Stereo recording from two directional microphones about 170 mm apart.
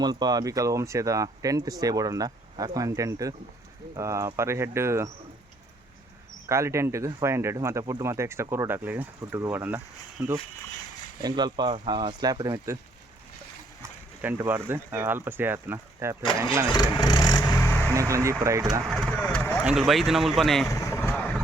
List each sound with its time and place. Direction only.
0.0 s speech: 25° right (ahead or behind)
6.5 s speech: 15° right (ahead or behind)
14.2 s speech: 10° right (ahead or behind)
16.7 s vehicle: 20° left (ahead or behind)
17.9 s speech: 20° right (ahead or behind)
18.9 s a sound: 5° left (ahead or behind)
19.6 s speech: centre (ahead or behind)
20.7 s vehicle: 15° left (ahead or behind)